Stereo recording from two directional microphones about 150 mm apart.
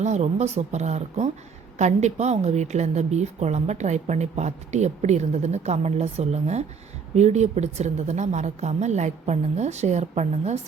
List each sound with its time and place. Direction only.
0.0 s a woman's voice: 50° right (ahead or behind)